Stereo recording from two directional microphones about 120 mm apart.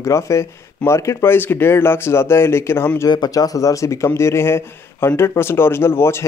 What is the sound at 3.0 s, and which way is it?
Speech, 35° left (ahead or behind).